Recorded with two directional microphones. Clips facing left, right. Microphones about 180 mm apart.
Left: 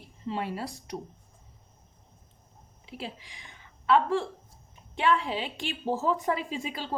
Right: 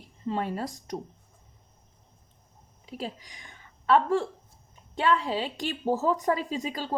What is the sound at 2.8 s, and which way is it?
Speech, 40° right (ahead or behind).